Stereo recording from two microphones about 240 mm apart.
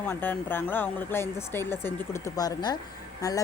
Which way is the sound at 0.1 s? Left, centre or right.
Centre.